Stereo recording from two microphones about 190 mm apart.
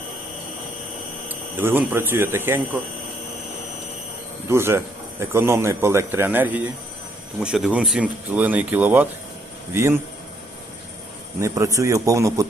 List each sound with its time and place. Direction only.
1.3 s speech: 10° right (ahead or behind)
4.4 s speech: 15° right (ahead or behind)
11.3 s speech: 15° right (ahead or behind)